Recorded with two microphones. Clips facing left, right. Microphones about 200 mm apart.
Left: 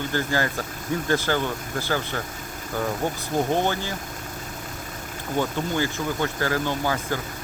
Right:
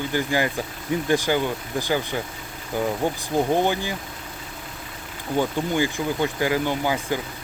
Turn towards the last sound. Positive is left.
turn(degrees=-15)  # may be behind; listen again after turning